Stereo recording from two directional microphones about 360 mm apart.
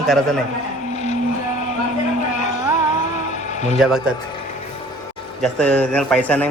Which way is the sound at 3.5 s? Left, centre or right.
Centre.